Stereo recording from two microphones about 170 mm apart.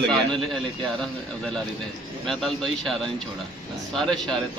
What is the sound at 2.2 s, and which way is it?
Speech, 5° left (ahead or behind).